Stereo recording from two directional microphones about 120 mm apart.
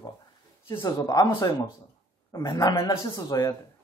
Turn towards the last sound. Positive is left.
turn(degrees=30)  # may be behind; listen again after turning